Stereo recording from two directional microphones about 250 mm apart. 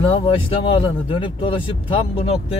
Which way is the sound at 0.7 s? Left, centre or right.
Left.